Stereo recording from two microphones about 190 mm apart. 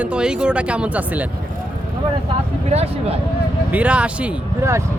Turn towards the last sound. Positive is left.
turn(degrees=-10)  # may be behind; listen again after turning